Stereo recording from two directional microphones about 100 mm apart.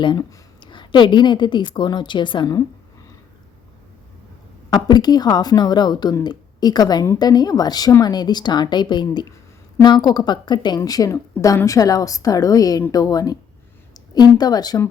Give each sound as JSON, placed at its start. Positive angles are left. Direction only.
{"t": 0.0, "sound": "a woman's voice", "side_deg": 50}
{"t": 4.7, "sound": "a woman's voice", "side_deg": 45}